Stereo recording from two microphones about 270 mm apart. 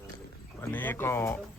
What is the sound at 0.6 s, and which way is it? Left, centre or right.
Speech, centre.